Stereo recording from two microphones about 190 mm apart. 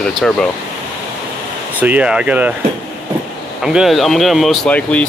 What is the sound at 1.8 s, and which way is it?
Speech, 10° right (ahead or behind).